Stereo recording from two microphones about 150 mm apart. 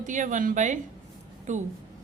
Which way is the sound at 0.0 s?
55° right (ahead or behind).